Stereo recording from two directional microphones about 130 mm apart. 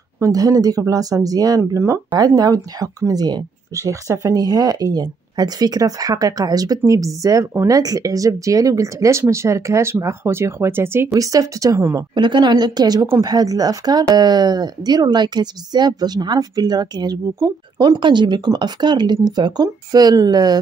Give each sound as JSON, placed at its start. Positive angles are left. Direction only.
{"t": 0.2, "sound": "speech", "side_deg": -25}
{"t": 12.1, "sound": "speech", "side_deg": -35}